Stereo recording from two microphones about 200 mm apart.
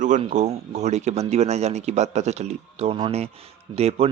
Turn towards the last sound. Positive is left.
turn(degrees=-30)  # may be behind; listen again after turning